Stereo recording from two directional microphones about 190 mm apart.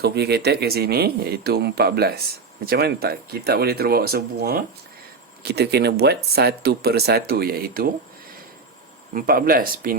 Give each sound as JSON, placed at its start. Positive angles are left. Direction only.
{"t": 0.0, "sound": "speech", "side_deg": -60}
{"t": 9.1, "sound": "speech", "side_deg": -50}